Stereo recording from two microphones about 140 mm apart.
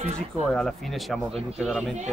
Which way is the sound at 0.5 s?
5° left (ahead or behind).